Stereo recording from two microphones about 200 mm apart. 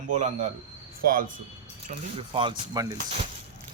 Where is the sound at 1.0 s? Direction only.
45° right (ahead or behind).